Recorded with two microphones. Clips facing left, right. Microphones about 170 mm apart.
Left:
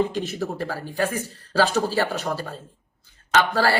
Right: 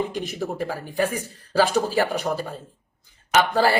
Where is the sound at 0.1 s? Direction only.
15° right (ahead or behind).